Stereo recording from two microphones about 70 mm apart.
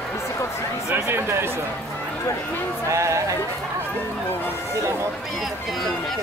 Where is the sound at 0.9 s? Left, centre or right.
Right.